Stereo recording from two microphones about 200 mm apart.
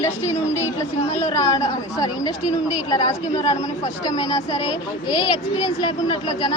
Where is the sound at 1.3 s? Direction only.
15° left (ahead or behind).